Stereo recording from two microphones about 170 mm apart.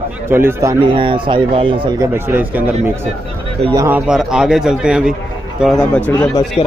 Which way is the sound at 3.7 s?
20° right (ahead or behind).